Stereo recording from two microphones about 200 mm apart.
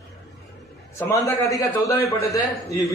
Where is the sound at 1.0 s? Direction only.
15° left (ahead or behind).